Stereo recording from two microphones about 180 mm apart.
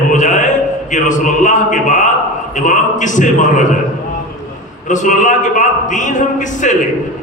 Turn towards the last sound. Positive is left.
turn(degrees=45)  # may be behind; listen again after turning